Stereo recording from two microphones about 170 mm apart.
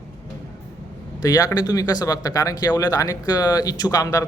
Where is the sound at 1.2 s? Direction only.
20° left (ahead or behind).